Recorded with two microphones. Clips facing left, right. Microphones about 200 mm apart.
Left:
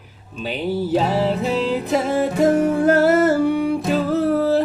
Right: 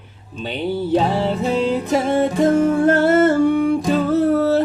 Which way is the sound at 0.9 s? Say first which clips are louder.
Right 1 dB; 5° left (ahead or behind).